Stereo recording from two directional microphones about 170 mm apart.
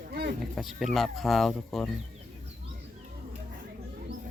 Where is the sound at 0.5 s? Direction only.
Centre (ahead or behind).